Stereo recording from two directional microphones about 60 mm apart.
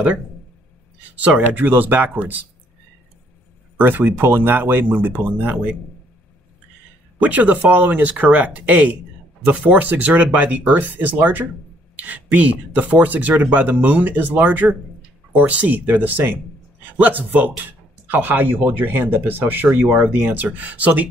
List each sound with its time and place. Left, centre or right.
1.1 s speech: right
3.7 s speech: right
7.2 s speech: right